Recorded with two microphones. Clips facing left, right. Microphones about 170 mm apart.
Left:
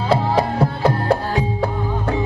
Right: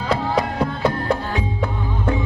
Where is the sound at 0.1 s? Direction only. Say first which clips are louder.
Left 3 dB; 30° left (ahead or behind).